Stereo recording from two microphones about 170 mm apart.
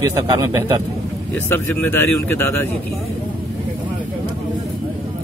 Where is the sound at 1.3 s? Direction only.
10° left (ahead or behind).